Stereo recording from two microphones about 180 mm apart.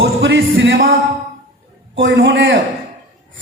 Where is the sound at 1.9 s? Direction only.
90° right.